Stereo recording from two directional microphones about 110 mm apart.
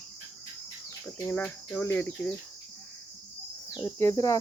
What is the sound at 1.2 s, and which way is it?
Speech, 20° left (ahead or behind).